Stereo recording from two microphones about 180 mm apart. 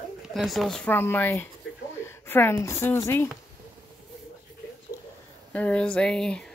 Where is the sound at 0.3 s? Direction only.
Centre (ahead or behind).